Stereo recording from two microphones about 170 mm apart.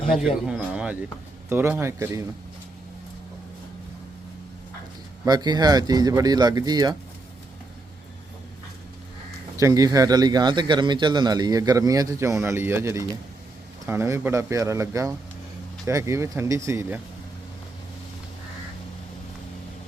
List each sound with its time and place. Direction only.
0.1 s a sound: centre (ahead or behind)
1.5 s speech: 10° right (ahead or behind)
5.2 s speech: 25° right (ahead or behind)
9.6 s speech: 20° right (ahead or behind)